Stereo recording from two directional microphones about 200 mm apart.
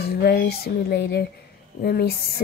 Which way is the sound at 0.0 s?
50° left (ahead or behind).